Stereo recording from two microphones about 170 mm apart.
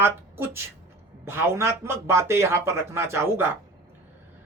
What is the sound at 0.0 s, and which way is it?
A woman's voice, 15° right (ahead or behind).